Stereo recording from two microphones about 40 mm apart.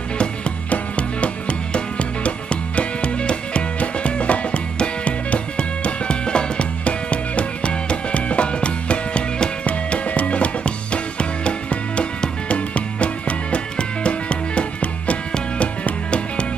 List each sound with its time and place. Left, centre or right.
0.7 s music: left